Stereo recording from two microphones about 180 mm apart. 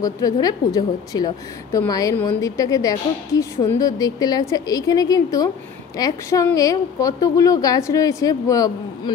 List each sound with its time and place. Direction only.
0.0 s speech: 20° left (ahead or behind)